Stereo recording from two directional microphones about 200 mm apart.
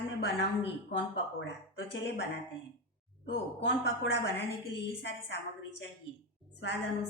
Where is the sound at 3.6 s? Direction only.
65° left (ahead or behind).